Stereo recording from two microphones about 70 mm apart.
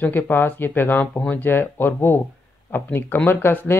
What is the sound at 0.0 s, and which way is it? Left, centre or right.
Speech, left.